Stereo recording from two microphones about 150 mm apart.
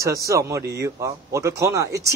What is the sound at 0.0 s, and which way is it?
Speech, 20° right (ahead or behind).